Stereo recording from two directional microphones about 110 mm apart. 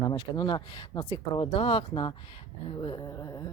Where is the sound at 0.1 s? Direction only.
40° left (ahead or behind).